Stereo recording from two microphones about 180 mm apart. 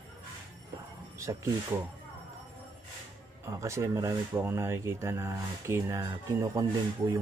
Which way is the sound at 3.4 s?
15° right (ahead or behind).